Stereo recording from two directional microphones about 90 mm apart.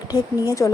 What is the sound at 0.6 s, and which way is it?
Speech, 30° left (ahead or behind).